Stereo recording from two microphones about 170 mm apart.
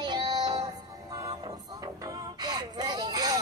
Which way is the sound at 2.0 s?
20° right (ahead or behind).